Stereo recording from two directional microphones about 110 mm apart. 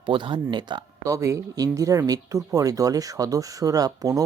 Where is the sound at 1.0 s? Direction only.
30° right (ahead or behind).